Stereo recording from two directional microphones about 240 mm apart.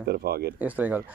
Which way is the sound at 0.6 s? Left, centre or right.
Centre.